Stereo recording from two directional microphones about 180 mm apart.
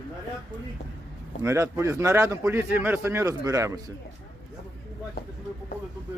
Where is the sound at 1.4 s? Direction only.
15° right (ahead or behind).